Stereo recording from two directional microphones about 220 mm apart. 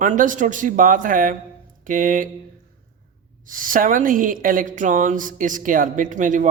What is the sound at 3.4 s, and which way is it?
Speech, 40° right (ahead or behind).